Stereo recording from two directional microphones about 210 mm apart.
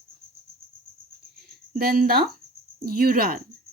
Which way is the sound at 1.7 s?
45° right (ahead or behind).